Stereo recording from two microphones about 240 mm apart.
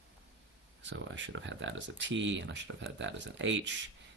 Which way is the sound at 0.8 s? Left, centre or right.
Right.